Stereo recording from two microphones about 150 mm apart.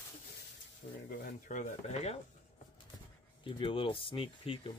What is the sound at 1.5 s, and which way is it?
Speech, 55° left (ahead or behind).